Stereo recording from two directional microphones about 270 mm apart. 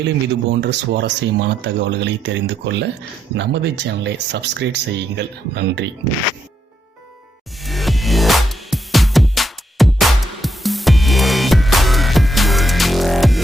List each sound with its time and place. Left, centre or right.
0.6 s speech: right
7.6 s music: centre